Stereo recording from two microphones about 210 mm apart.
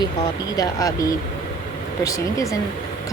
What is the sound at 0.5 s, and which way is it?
Speech, 15° left (ahead or behind).